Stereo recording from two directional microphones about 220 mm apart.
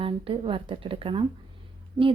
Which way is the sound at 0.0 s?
25° right (ahead or behind).